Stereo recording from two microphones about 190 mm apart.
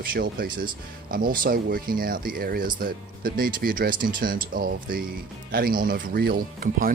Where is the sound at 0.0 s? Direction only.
50° right (ahead or behind).